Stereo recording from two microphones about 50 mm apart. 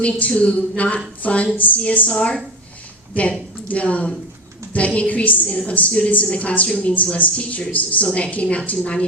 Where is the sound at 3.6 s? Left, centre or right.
Left.